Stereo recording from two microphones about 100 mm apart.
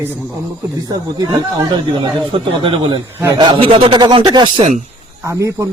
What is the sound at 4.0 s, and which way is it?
Speech, 50° right (ahead or behind).